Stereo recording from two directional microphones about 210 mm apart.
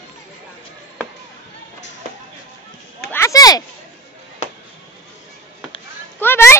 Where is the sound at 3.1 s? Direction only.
15° left (ahead or behind).